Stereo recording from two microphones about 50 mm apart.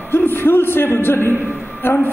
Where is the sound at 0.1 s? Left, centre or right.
Left.